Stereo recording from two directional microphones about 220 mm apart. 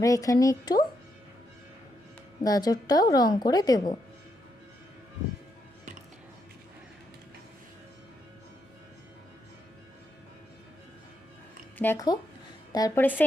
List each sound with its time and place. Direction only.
0.0 s a woman's voice: 15° left (ahead or behind)
2.4 s a woman's voice: 15° left (ahead or behind)
11.8 s a woman's voice: 10° left (ahead or behind)